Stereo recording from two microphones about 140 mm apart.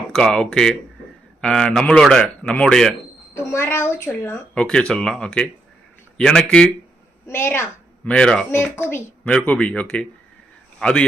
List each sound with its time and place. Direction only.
0.1 s a man's voice: 5° left (ahead or behind)
3.3 s a man's voice: 15° left (ahead or behind)
7.3 s a woman's voice: 15° left (ahead or behind)
8.1 s a man's voice: 5° left (ahead or behind)
8.4 s speech: 15° left (ahead or behind)